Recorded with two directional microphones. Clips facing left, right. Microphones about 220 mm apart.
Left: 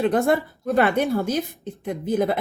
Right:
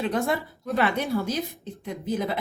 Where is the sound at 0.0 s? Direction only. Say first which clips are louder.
Left 6 dB; 55° left (ahead or behind).